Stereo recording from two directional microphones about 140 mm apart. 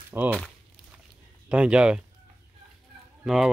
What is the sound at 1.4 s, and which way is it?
Speech, 10° right (ahead or behind).